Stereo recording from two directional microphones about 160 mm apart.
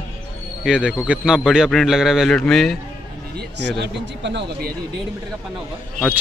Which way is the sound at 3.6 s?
90° right.